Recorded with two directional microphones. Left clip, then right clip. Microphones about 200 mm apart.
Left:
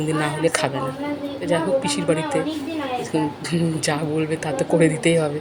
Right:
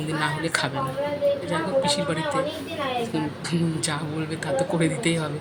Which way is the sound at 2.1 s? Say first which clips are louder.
Left 7 dB; 10° left (ahead or behind).